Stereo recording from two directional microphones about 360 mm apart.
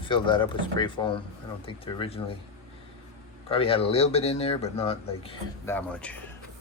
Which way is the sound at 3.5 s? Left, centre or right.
Centre.